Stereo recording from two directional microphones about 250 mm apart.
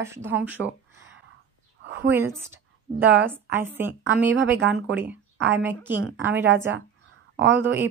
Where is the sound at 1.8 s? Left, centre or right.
Right.